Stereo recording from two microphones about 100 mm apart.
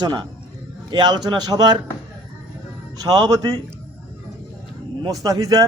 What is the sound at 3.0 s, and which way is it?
Speech, 40° right (ahead or behind).